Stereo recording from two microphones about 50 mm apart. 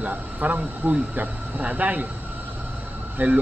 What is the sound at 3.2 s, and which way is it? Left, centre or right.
Speech, right.